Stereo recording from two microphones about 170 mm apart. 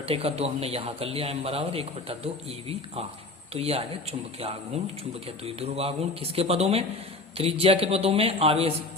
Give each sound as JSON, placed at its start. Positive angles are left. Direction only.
{"t": 0.0, "sound": "a man's voice", "side_deg": -35}